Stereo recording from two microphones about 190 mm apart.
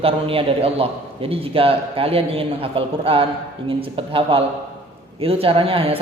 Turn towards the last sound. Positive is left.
turn(degrees=-30)  # may be behind; listen again after turning